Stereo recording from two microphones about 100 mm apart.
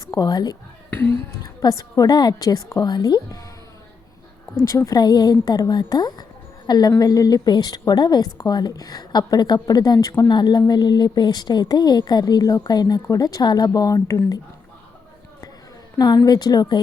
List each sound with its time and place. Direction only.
0.1 s speech: 40° left (ahead or behind)
0.9 s speech: 20° left (ahead or behind)
1.6 s a woman's voice: 40° left (ahead or behind)
4.7 s a woman's voice: 35° left (ahead or behind)
16.0 s a woman's voice: 40° left (ahead or behind)